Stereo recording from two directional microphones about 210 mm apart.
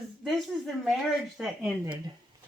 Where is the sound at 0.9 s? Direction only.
Centre (ahead or behind).